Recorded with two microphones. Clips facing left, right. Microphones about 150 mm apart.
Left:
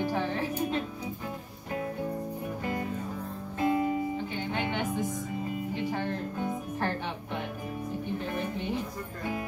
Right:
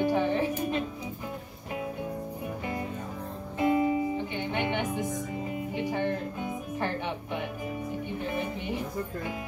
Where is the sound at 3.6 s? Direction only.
20° right (ahead or behind).